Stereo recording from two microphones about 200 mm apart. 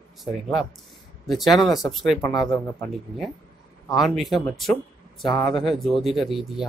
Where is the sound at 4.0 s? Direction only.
Centre (ahead or behind).